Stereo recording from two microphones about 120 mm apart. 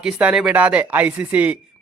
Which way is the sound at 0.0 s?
10° right (ahead or behind).